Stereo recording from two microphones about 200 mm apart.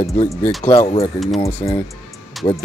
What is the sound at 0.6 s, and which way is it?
Speech, 30° left (ahead or behind).